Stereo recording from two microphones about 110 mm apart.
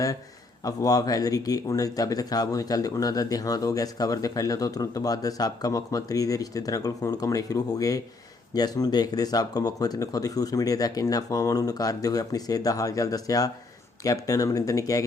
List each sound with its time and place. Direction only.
0.6 s speech: 35° left (ahead or behind)